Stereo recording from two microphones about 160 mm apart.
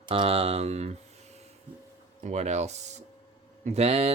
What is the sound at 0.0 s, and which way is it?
Speech, 35° right (ahead or behind).